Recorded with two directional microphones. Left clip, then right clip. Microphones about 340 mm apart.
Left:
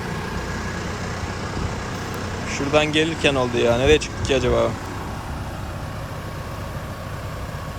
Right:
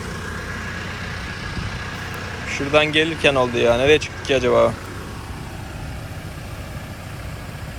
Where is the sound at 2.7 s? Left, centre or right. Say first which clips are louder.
Right 2 dB; centre.